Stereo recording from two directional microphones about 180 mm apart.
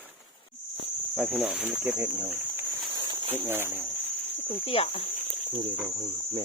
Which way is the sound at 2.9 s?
25° right (ahead or behind).